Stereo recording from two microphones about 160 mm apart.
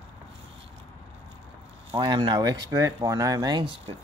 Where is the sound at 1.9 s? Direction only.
30° right (ahead or behind).